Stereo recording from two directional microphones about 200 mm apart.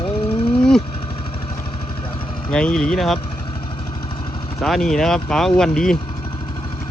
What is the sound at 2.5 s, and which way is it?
Speech, 5° left (ahead or behind).